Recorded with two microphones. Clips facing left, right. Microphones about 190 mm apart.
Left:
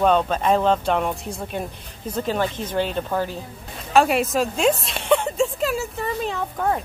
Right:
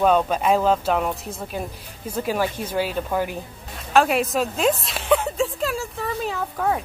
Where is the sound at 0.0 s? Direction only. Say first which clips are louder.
Even; 5° right (ahead or behind).